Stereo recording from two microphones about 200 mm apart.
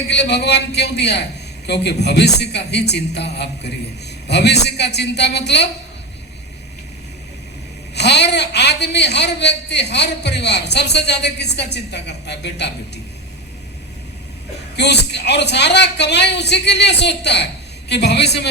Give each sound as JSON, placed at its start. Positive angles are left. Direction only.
{"t": 0.1, "sound": "a man's voice", "side_deg": 60}
{"t": 7.9, "sound": "a man's voice", "side_deg": 55}
{"t": 14.8, "sound": "a man's voice", "side_deg": 60}